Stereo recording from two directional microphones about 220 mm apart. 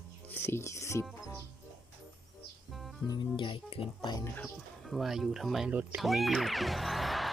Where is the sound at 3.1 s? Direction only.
20° left (ahead or behind).